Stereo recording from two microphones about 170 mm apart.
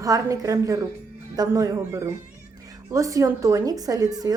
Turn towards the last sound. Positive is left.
turn(degrees=-20)  # may be behind; listen again after turning